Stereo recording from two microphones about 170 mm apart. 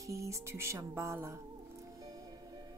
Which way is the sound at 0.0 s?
20° right (ahead or behind).